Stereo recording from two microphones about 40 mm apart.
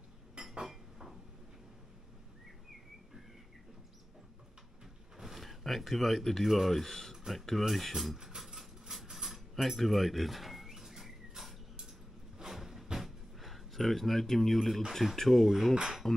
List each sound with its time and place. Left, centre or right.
0.4 s dishes: centre
5.2 s speech: centre
8.4 s a sound: centre
9.1 s cutlery: centre
12.4 s music: centre
13.0 s a sound: centre
14.9 s speech: centre
16.0 s music: centre